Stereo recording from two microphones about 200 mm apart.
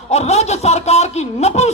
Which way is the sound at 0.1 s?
35° left (ahead or behind).